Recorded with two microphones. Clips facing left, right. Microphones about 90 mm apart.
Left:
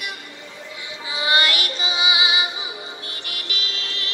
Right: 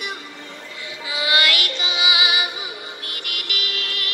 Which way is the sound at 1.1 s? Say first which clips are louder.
Even; 30° left (ahead or behind).